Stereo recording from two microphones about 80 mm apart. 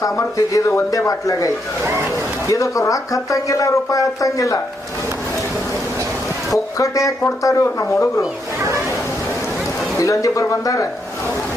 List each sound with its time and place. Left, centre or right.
0.0 s speech: left
6.7 s speech: left
10.0 s speech: left